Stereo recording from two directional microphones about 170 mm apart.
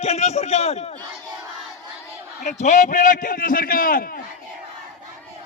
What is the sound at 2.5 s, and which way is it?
A man's voice, 45° left (ahead or behind).